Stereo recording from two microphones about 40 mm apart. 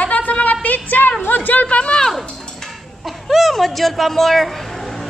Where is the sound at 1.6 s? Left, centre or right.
Left.